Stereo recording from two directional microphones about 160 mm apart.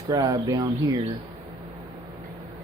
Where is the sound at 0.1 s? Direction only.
20° right (ahead or behind).